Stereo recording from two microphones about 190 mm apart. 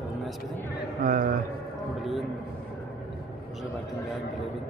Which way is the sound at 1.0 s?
45° right (ahead or behind).